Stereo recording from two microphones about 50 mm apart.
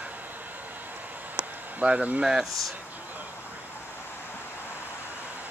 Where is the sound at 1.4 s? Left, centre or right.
Right.